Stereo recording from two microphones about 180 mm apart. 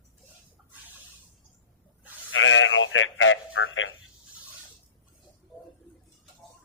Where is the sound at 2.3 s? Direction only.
90° left.